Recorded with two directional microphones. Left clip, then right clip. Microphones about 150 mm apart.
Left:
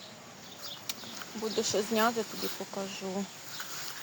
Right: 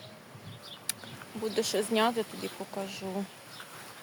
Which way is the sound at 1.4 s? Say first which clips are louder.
Right 1 dB; 15° right (ahead or behind).